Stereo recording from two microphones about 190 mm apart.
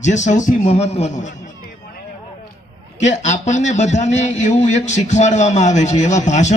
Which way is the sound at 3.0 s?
40° left (ahead or behind).